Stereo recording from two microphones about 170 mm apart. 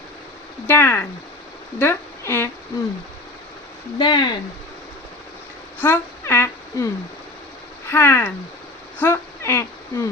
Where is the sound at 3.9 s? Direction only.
25° left (ahead or behind).